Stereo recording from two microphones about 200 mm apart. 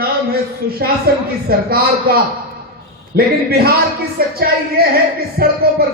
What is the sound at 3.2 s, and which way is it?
A woman's voice, 50° right (ahead or behind).